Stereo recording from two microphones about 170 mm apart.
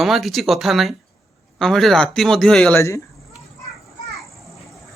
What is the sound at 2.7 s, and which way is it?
Speech, 15° left (ahead or behind).